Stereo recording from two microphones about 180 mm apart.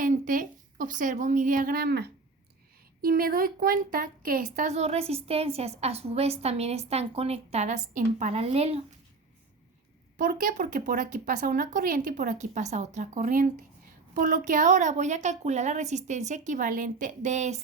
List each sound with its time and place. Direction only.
0.0 s a woman's voice: 45° right (ahead or behind)
10.2 s a woman's voice: 50° right (ahead or behind)